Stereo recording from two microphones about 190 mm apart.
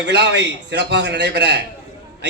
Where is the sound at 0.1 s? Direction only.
65° right (ahead or behind).